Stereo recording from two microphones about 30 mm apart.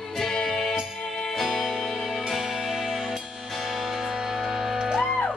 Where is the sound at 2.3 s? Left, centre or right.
Centre.